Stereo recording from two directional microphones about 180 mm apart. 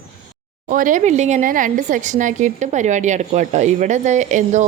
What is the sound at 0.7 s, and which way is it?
Speech, 45° right (ahead or behind).